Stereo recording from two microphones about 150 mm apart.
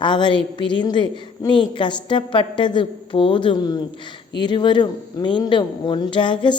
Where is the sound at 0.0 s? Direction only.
30° left (ahead or behind).